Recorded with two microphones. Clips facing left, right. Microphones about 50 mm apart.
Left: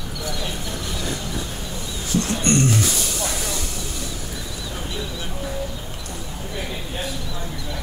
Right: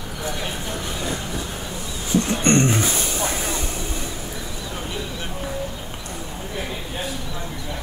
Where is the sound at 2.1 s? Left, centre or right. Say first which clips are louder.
Right 2 dB; right.